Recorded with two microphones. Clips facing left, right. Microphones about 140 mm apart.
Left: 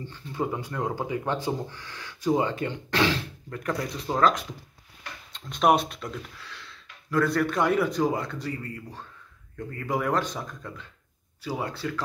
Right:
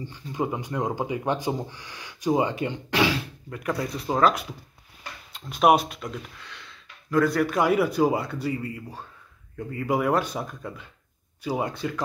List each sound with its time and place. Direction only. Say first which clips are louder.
0.0 s speech: right 2 dB; 15° right (ahead or behind)